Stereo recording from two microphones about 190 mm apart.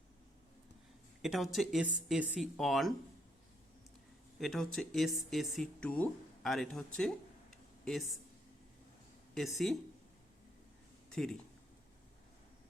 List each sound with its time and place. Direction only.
1.2 s speech: centre (ahead or behind)
4.4 s speech: centre (ahead or behind)
7.5 s a sound: centre (ahead or behind)
9.3 s speech: centre (ahead or behind)
11.1 s speech: 5° left (ahead or behind)